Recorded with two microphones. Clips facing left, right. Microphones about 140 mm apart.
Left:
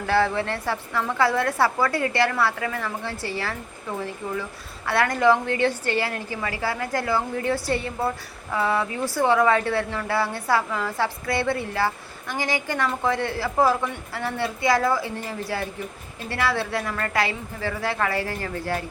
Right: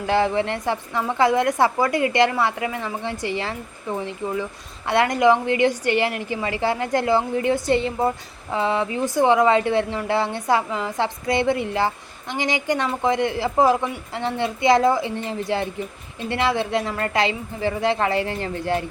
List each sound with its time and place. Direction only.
0.1 s a woman's voice: 20° right (ahead or behind)
4.9 s a woman's voice: 20° right (ahead or behind)